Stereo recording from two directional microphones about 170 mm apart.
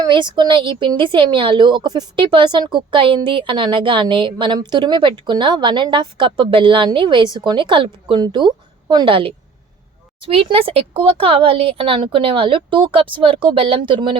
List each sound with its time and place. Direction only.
0.0 s a woman's voice: 25° right (ahead or behind)